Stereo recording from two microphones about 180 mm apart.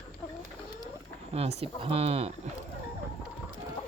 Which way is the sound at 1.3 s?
35° right (ahead or behind).